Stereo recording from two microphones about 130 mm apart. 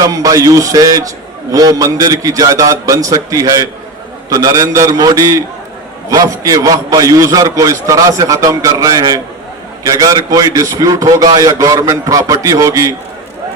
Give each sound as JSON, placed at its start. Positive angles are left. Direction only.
{"t": 0.0, "sound": "a man's voice", "side_deg": -25}